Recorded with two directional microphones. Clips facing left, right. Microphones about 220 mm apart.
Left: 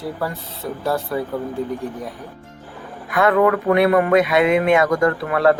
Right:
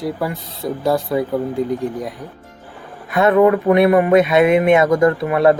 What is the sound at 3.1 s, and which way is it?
Speech, 25° right (ahead or behind).